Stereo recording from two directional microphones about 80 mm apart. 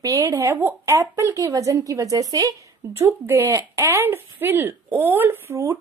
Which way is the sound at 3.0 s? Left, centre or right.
Right.